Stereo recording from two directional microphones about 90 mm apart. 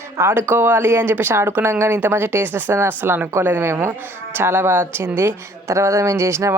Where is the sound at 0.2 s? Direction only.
25° right (ahead or behind).